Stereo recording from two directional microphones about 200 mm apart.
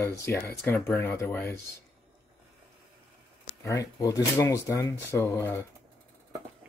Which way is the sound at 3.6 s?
15° left (ahead or behind).